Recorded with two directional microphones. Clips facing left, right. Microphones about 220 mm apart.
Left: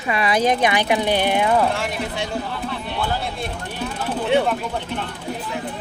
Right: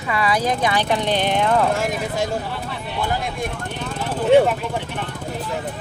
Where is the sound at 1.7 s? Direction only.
45° right (ahead or behind).